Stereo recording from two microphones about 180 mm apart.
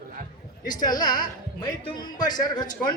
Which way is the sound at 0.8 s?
20° left (ahead or behind).